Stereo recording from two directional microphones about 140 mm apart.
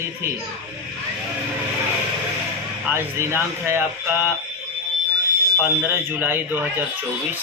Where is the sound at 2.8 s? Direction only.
15° right (ahead or behind).